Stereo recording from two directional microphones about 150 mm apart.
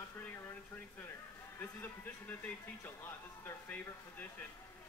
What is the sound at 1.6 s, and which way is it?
Speech, 10° left (ahead or behind).